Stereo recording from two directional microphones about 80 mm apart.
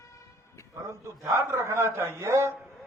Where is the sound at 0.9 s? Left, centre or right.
Right.